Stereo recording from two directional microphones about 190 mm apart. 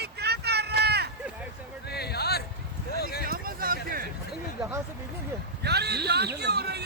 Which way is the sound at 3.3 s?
50° right (ahead or behind).